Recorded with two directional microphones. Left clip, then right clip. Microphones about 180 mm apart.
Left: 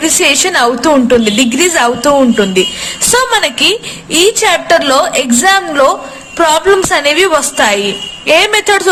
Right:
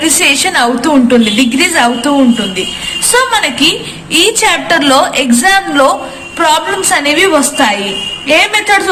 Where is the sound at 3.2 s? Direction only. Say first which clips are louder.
Right 1 dB; 55° left (ahead or behind).